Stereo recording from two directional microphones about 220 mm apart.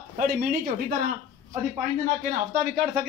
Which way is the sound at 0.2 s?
40° right (ahead or behind).